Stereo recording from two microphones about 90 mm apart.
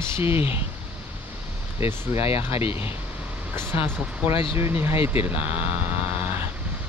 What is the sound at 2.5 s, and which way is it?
Speech, 90° left.